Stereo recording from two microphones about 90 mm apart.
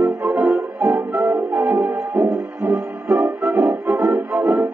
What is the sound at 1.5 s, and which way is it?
Music, 30° right (ahead or behind).